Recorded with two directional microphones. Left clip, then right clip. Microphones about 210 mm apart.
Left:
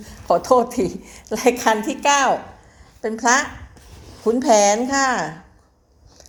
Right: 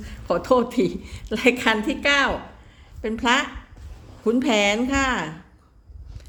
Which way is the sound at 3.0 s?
25° right (ahead or behind).